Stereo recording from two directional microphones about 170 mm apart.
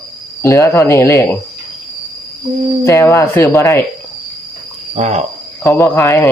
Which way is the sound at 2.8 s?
15° left (ahead or behind).